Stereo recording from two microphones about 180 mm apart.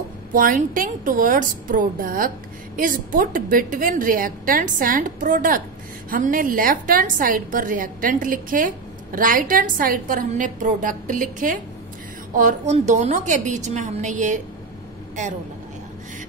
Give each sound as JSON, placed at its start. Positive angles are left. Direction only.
{"t": 0.3, "sound": "a woman's voice", "side_deg": -50}